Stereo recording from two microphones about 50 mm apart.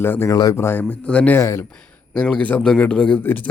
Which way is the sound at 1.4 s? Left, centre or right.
Left.